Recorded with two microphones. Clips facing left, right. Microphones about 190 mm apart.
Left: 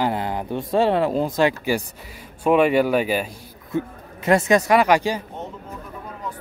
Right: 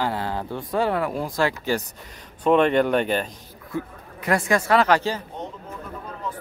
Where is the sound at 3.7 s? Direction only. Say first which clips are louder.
Left 4 dB; 25° left (ahead or behind).